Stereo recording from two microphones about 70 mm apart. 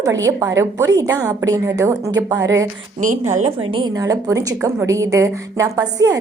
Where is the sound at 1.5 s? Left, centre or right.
Right.